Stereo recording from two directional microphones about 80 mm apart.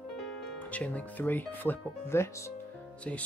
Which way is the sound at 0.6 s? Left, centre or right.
Centre.